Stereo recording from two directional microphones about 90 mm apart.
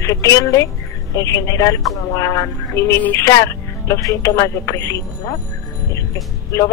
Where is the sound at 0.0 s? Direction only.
35° left (ahead or behind).